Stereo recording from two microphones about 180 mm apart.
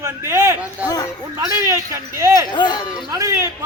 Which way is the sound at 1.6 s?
15° right (ahead or behind).